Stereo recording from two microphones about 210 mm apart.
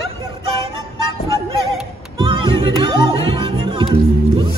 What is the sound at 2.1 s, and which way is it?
Music, 25° right (ahead or behind).